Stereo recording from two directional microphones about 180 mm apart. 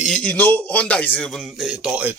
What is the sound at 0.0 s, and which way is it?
Speech, 5° left (ahead or behind).